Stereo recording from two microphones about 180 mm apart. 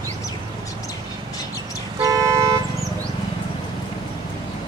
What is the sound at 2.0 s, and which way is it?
Vehicle, 20° right (ahead or behind).